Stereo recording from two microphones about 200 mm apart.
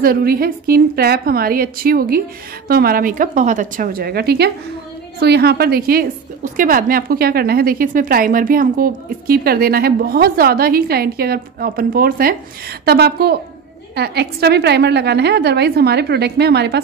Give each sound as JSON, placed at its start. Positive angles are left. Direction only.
{"t": 0.0, "sound": "a woman's voice", "side_deg": -50}